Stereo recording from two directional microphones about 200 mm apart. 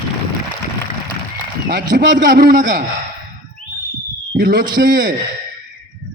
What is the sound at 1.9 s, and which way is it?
Speech, 45° right (ahead or behind).